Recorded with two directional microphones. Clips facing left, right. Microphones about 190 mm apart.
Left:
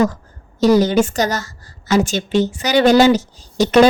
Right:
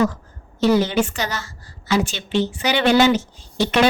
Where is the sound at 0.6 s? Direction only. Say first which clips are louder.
Left 4 dB; 40° left (ahead or behind).